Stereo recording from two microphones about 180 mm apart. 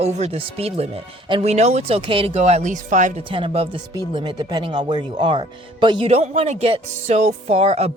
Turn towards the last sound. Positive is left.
turn(degrees=-35)  # may be behind; listen again after turning